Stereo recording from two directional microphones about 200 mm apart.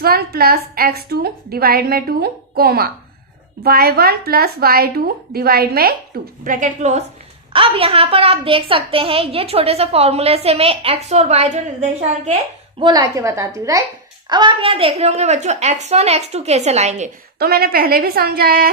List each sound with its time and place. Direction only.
0.0 s a woman's voice: 50° right (ahead or behind); by 12.3 s 35° right (ahead or behind)
12.8 s a woman's voice: 20° right (ahead or behind)
17.3 s a woman's voice: 50° right (ahead or behind)